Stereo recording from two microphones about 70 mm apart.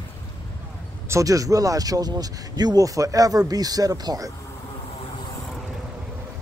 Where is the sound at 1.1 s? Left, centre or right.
Right.